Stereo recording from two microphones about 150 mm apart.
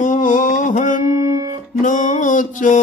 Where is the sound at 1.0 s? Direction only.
25° right (ahead or behind).